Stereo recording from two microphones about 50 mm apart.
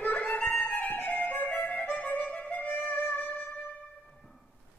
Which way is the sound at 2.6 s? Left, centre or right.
Left.